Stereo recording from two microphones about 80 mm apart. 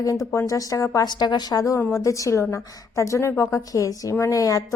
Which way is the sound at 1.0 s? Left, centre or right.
Left.